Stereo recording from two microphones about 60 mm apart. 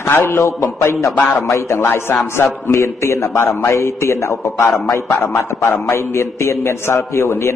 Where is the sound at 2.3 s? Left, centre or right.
Left.